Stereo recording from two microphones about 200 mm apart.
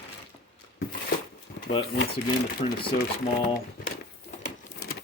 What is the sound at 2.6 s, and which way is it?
Speech, 25° left (ahead or behind).